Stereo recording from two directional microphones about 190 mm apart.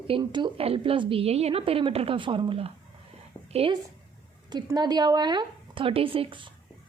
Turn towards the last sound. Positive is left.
turn(degrees=-25)  # may be behind; listen again after turning